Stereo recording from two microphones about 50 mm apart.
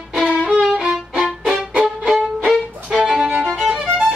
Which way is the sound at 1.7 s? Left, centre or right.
Centre.